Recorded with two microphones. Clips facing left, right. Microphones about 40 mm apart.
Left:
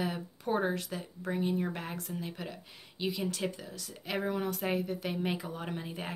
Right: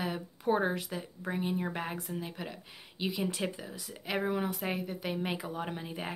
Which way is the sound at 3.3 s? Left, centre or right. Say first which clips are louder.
Even; centre.